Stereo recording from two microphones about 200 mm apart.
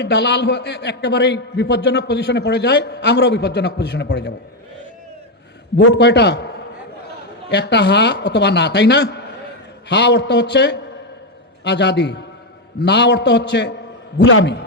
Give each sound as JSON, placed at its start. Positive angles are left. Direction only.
{"t": 0.0, "sound": "a man's voice", "side_deg": 60}
{"t": 5.7, "sound": "a man's voice", "side_deg": 60}
{"t": 7.5, "sound": "a man's voice", "side_deg": 60}